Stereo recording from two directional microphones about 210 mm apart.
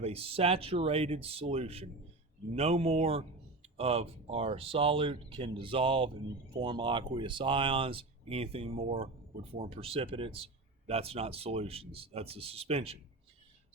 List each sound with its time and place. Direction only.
0.0 s speech: 30° right (ahead or behind)